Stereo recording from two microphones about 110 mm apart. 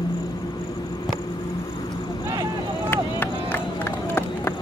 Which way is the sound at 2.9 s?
20° left (ahead or behind).